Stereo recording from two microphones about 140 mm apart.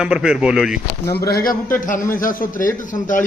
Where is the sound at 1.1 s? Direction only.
90° left.